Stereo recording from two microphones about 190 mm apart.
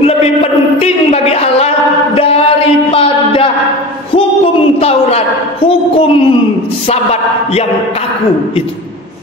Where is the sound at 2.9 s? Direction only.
30° left (ahead or behind).